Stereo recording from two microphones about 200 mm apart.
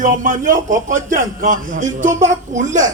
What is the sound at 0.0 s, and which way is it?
A man's voice, 40° right (ahead or behind).